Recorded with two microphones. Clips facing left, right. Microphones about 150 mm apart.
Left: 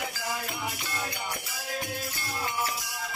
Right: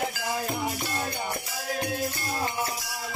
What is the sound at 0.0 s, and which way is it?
Music, 40° right (ahead or behind).